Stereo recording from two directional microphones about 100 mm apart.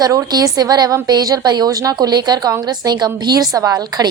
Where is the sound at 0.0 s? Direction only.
35° right (ahead or behind).